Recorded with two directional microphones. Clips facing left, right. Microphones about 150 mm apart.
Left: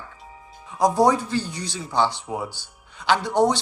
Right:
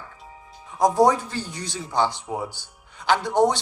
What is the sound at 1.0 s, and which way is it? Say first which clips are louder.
Speech: left 1 dB; 45° right (ahead or behind).